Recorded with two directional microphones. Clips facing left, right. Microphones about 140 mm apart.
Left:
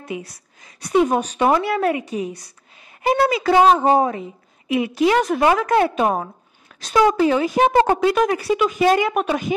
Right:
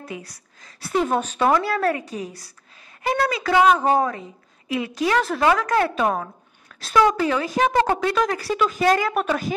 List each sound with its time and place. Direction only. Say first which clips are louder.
0.9 s speech: left 4 dB; 10° left (ahead or behind)
2.0 s a woman's voice: left 6 dB; centre (ahead or behind)
3.0 s speech: left 5 dB; 25° left (ahead or behind)
8.5 s a woman's voice: left 2 dB; 5° left (ahead or behind)
8.8 s speech: left 2 dB; 20° left (ahead or behind)